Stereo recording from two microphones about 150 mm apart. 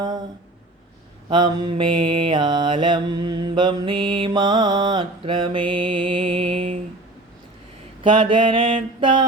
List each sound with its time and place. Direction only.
1.3 s mantra: 30° right (ahead or behind)
8.0 s mantra: 35° right (ahead or behind)